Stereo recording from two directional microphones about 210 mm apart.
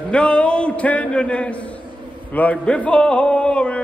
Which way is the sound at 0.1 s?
5° left (ahead or behind).